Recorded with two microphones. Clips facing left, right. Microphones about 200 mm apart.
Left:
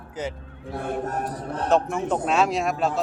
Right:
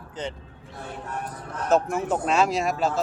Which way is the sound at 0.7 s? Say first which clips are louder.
Left 7 dB; 50° left (ahead or behind).